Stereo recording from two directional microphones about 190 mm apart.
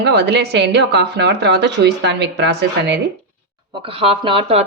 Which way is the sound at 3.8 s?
30° right (ahead or behind).